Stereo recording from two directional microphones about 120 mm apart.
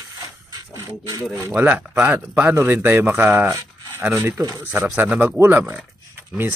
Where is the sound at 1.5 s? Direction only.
15° right (ahead or behind).